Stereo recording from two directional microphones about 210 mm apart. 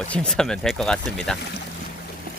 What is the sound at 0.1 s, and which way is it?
Speech, 5° left (ahead or behind).